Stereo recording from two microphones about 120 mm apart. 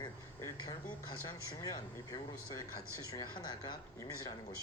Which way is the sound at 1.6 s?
30° left (ahead or behind).